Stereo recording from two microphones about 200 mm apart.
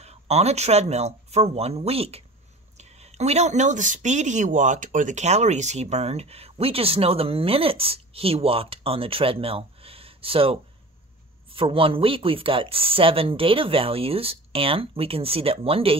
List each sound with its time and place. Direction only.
0.0 s speech: 30° right (ahead or behind)